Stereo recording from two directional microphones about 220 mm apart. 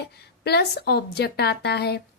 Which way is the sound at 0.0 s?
45° left (ahead or behind).